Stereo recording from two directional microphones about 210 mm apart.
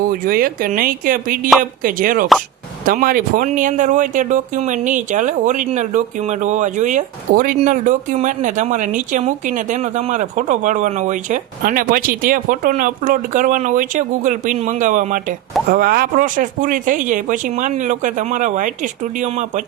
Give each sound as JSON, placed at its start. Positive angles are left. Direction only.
{"t": 0.1, "sound": "speech", "side_deg": -40}